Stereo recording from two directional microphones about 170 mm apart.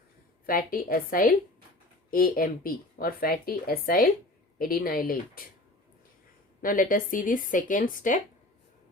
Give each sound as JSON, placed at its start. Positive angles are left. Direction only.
{"t": 0.4, "sound": "speech", "side_deg": 55}
{"t": 6.6, "sound": "speech", "side_deg": 55}